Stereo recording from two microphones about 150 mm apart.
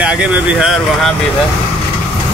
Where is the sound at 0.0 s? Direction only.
5° right (ahead or behind).